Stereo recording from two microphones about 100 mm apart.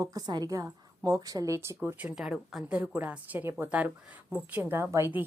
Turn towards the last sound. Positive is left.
turn(degrees=-25)  # may be behind; listen again after turning